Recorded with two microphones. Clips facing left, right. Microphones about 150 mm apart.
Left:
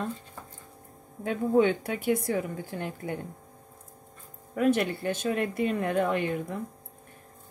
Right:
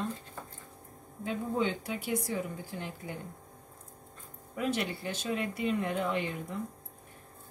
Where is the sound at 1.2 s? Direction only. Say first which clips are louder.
Left 8 dB; 60° left (ahead or behind).